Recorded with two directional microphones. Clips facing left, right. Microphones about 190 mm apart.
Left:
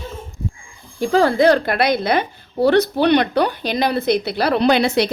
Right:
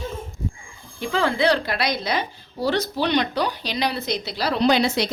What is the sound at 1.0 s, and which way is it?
A woman's voice, 40° left (ahead or behind).